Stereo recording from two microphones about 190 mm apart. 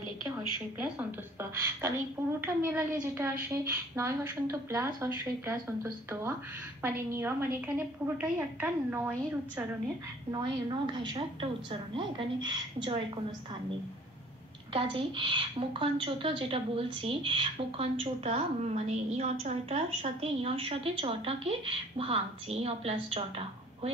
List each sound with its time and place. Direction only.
0.7 s a woman's voice: 10° right (ahead or behind)
10.3 s a woman's voice: 25° right (ahead or behind)
14.7 s a woman's voice: 25° right (ahead or behind)